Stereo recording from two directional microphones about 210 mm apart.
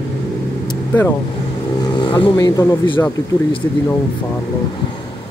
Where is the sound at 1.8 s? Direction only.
20° left (ahead or behind).